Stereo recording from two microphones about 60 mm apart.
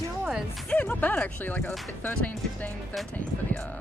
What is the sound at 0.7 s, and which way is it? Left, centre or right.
Speech, left.